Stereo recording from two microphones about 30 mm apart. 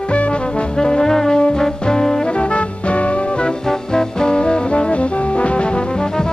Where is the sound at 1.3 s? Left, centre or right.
Left.